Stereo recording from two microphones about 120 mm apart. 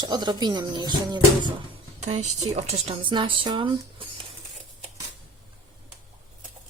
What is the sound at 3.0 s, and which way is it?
Speech, 45° right (ahead or behind).